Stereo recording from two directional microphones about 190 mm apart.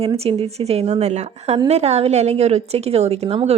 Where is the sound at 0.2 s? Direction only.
30° right (ahead or behind).